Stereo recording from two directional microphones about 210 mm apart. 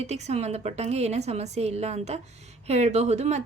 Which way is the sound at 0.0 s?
30° right (ahead or behind).